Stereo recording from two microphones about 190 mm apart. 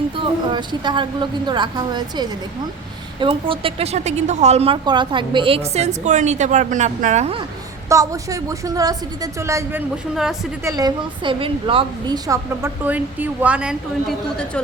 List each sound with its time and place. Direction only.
0.2 s a woman's voice: 25° right (ahead or behind)
7.9 s a woman's voice: 15° right (ahead or behind); by 14.6 s centre (ahead or behind)